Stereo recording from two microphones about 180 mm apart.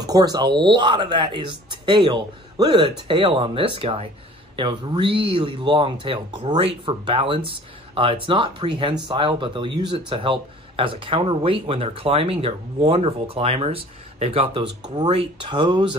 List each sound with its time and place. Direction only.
0.0 s speech: 20° right (ahead or behind)